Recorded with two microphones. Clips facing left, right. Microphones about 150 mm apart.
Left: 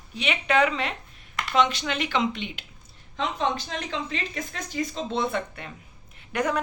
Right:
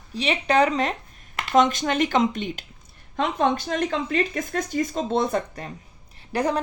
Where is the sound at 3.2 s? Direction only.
55° right (ahead or behind).